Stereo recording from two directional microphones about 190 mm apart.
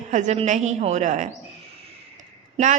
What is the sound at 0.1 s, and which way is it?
A woman's voice, 40° right (ahead or behind).